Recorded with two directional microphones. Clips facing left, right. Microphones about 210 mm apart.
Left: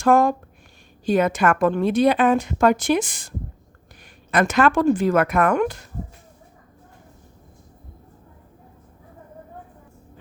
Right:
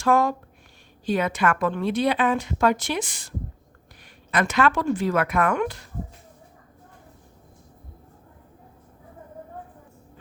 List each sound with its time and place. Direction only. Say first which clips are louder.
0.0 s a woman's voice: left 4 dB; 50° left (ahead or behind)